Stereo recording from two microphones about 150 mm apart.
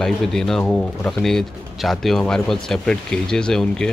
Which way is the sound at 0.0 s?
5° left (ahead or behind).